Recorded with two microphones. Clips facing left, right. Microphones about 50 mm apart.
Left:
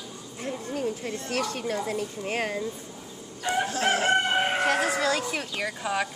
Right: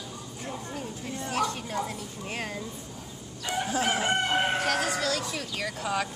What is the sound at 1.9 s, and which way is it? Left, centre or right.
Speech, left.